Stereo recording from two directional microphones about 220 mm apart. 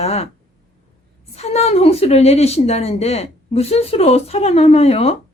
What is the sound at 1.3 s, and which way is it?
A woman's voice, 30° left (ahead or behind).